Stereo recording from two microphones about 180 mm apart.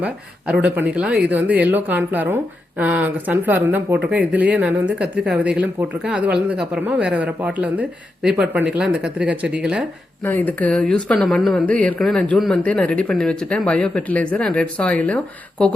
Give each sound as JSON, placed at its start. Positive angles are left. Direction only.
{"t": 0.0, "sound": "a woman's voice", "side_deg": -5}
{"t": 10.2, "sound": "a woman's voice", "side_deg": 10}